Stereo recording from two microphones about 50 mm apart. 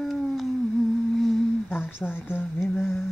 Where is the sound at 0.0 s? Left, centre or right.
Centre.